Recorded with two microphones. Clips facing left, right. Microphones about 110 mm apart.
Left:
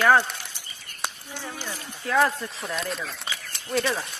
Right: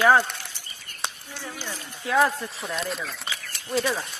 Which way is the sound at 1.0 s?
Centre (ahead or behind).